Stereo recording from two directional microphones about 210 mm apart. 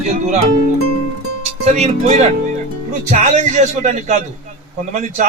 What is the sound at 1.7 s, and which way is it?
Speech, 35° right (ahead or behind).